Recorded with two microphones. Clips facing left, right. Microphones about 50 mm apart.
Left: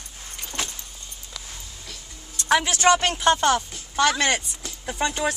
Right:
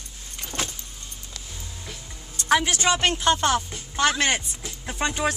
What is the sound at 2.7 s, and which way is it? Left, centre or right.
Speech, left.